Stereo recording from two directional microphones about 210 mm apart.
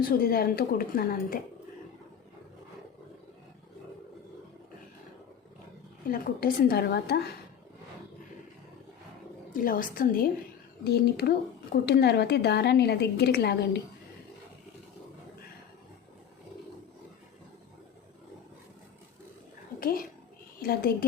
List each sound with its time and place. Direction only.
0.0 s speech: 45° left (ahead or behind)
6.1 s speech: 45° left (ahead or behind)
9.5 s speech: 40° left (ahead or behind)
19.8 s a child's voice: 45° left (ahead or behind)